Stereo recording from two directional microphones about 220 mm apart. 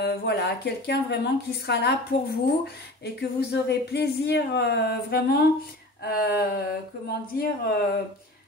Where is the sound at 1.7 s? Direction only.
50° left (ahead or behind).